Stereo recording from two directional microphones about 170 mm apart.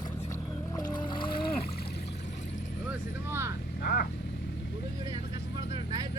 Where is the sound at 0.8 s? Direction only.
25° left (ahead or behind).